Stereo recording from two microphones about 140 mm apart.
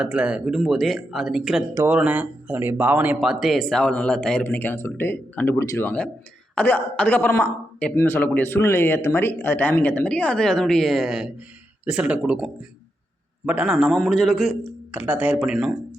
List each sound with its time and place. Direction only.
0.0 s speech: 10° right (ahead or behind)
1.7 s speech: 20° right (ahead or behind)
3.2 s a man's voice: centre (ahead or behind)